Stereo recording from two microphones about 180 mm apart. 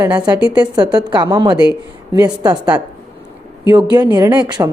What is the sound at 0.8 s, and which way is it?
Speech, 25° right (ahead or behind).